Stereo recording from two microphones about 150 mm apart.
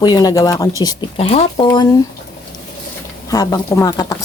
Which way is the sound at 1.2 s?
40° left (ahead or behind).